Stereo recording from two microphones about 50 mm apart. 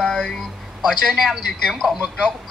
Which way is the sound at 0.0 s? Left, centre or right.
Centre.